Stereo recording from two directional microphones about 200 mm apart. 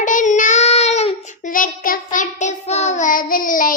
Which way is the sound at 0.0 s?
40° left (ahead or behind).